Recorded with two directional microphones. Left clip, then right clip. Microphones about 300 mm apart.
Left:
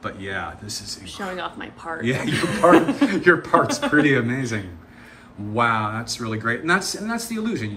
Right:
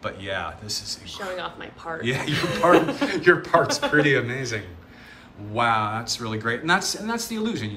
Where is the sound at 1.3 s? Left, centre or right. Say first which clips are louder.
Left 1 dB; left.